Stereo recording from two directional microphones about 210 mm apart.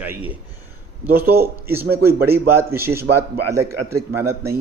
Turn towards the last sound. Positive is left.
turn(degrees=-15)  # may be behind; listen again after turning